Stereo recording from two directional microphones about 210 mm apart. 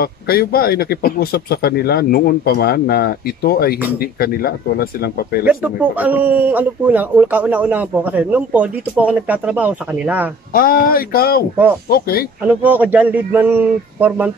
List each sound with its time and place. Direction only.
0.0 s speech: 45° left (ahead or behind)
5.4 s speech: 5° right (ahead or behind)
10.5 s speech: 45° left (ahead or behind)
12.4 s speech: 10° right (ahead or behind)